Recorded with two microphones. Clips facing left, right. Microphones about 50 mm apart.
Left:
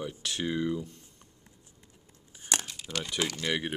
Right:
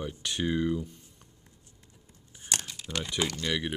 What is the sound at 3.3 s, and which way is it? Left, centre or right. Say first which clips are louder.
Speech: even; centre.